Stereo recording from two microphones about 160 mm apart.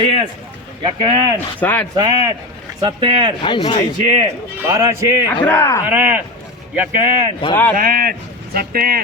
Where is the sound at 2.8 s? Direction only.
30° right (ahead or behind).